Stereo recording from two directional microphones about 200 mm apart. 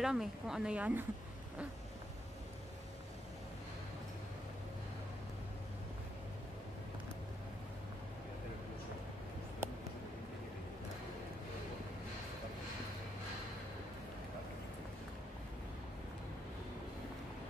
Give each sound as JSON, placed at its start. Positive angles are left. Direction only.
{"t": 0.0, "sound": "speech", "side_deg": 0}